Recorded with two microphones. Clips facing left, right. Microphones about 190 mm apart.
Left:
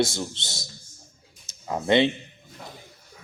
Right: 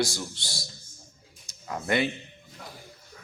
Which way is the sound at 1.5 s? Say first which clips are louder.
Left 6 dB; 25° left (ahead or behind).